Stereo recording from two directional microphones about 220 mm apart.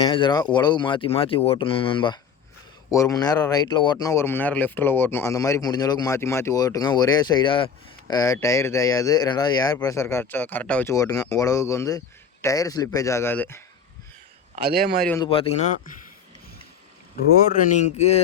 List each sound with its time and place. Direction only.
0.0 s speech: 20° left (ahead or behind)
14.5 s a man's voice: 45° right (ahead or behind)
15.2 s speech: 25° left (ahead or behind)
17.3 s speech: 40° left (ahead or behind)